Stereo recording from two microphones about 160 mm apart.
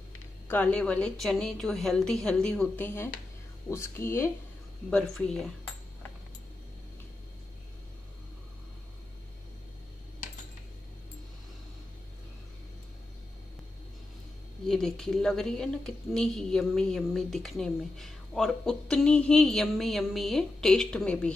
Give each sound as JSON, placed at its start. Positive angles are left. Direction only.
{"t": 0.5, "sound": "a woman's voice", "side_deg": 10}
{"t": 4.9, "sound": "a woman's voice", "side_deg": 5}
{"t": 14.7, "sound": "a woman's voice", "side_deg": 5}